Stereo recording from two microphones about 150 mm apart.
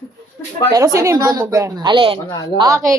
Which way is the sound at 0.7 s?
20° right (ahead or behind).